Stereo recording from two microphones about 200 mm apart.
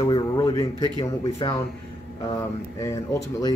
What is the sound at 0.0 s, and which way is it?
Speech, 20° left (ahead or behind).